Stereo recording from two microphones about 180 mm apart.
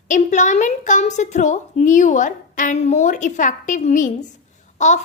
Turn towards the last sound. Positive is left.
turn(degrees=40)  # may be behind; listen again after turning